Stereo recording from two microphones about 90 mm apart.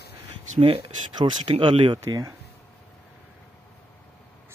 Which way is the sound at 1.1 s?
60° right (ahead or behind).